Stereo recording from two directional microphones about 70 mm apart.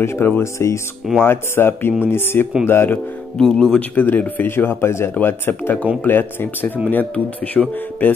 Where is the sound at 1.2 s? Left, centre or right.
Left.